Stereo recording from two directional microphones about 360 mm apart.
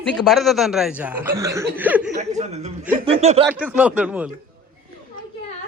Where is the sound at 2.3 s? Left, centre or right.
Centre.